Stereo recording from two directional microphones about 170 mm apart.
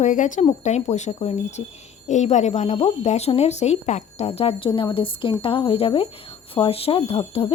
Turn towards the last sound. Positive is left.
turn(degrees=35)  # may be behind; listen again after turning